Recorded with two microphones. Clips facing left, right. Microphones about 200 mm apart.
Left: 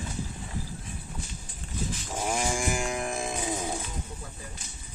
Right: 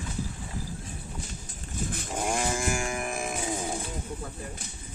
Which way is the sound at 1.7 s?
55° right (ahead or behind).